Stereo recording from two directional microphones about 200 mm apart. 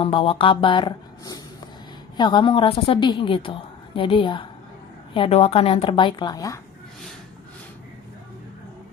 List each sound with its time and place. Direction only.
0.0 s a woman's voice: 25° left (ahead or behind)